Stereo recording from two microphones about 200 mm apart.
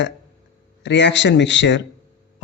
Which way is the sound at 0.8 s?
60° left (ahead or behind).